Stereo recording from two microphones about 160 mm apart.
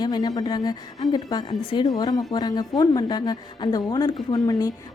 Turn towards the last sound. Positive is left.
turn(degrees=25)  # may be behind; listen again after turning